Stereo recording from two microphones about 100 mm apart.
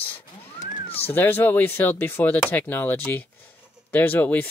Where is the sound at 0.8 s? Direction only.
80° left.